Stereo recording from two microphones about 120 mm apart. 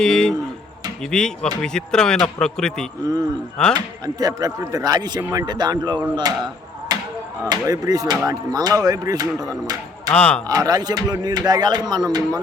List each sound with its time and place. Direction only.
0.0 s speech: 5° left (ahead or behind)
3.8 s speech: 30° right (ahead or behind)
10.1 s speech: 10° left (ahead or behind)
10.4 s speech: 30° right (ahead or behind)